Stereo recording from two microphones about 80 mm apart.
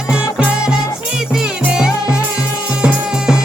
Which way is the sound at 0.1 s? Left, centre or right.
Centre.